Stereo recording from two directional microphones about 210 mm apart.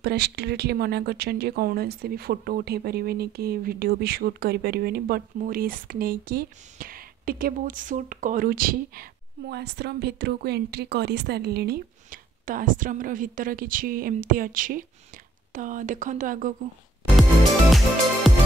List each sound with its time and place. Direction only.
0.0 s speech: 50° right (ahead or behind)
17.6 s music: centre (ahead or behind)